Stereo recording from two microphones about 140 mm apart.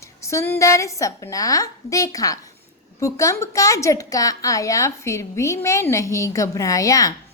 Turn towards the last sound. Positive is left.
turn(degrees=25)  # may be behind; listen again after turning